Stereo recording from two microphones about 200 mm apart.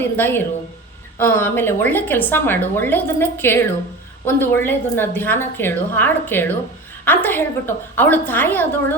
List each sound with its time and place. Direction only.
0.0 s a woman's voice: 10° left (ahead or behind)